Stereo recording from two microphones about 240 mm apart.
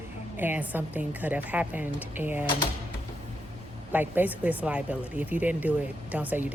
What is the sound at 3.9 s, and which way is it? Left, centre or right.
Speech, centre.